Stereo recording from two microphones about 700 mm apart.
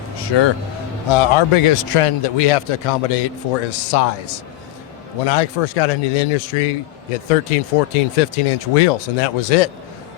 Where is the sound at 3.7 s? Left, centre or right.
Left.